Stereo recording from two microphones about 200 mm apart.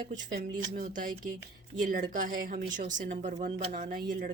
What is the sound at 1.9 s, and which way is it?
Speech, 40° right (ahead or behind).